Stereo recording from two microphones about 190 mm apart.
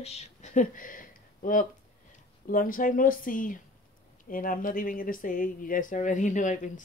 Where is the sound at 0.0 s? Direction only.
35° left (ahead or behind).